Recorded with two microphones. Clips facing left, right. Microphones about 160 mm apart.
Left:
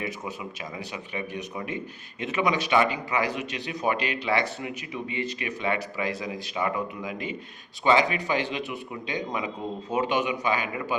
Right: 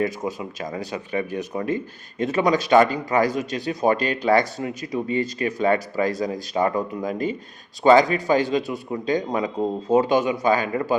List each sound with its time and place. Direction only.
0.0 s a man's voice: 40° right (ahead or behind)